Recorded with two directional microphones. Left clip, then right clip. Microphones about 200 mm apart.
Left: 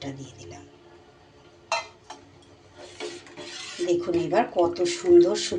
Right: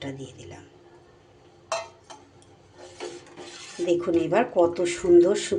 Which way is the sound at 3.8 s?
15° right (ahead or behind).